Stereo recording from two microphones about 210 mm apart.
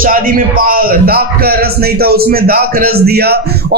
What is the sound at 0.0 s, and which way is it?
A man's voice, 40° right (ahead or behind).